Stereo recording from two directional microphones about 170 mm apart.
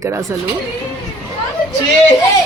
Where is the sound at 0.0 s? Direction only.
15° right (ahead or behind).